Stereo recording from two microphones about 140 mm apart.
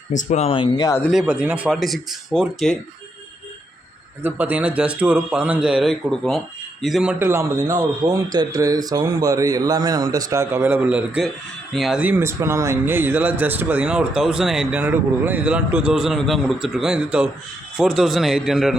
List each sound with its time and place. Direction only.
0.2 s speech: 55° left (ahead or behind)
0.5 s speech: 30° left (ahead or behind)
1.1 s a man's voice: 5° right (ahead or behind)
4.2 s a man's voice: 10° right (ahead or behind)
7.2 s a man's voice: 15° right (ahead or behind); by 18.8 s centre (ahead or behind)